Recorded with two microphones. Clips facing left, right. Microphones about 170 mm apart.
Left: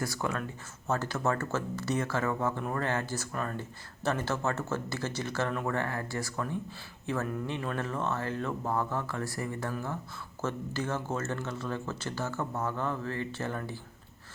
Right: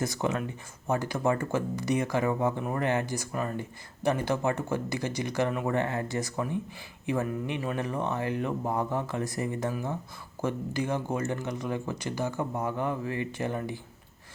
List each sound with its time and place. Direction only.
0.0 s speech: 20° right (ahead or behind)